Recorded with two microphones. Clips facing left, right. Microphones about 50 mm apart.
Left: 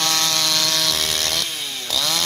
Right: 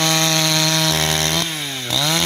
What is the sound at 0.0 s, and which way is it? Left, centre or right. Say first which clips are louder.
Chainsaw: right 4 dB; right.